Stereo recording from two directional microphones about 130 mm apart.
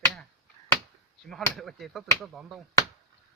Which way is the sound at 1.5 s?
Centre (ahead or behind).